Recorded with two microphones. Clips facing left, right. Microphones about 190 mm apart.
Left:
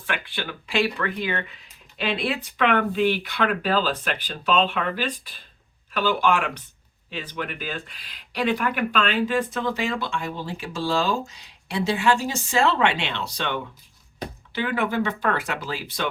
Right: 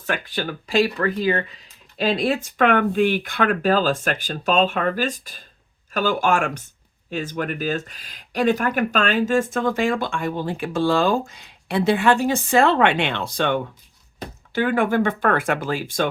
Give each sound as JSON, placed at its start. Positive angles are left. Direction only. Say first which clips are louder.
{"t": 0.0, "sound": "speech", "louder": "right 5 dB", "side_deg": -40}